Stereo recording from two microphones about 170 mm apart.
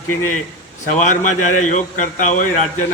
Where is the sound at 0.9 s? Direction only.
45° left (ahead or behind).